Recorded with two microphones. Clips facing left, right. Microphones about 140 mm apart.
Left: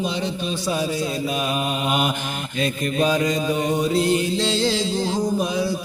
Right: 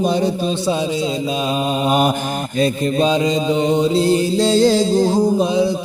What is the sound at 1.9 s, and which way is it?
Mantra, 40° right (ahead or behind).